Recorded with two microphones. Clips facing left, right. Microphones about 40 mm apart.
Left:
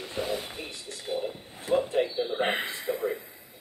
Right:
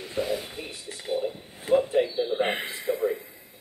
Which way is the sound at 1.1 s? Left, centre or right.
Centre.